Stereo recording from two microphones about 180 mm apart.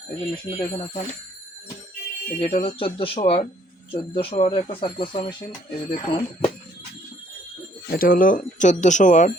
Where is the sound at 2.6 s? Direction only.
30° left (ahead or behind).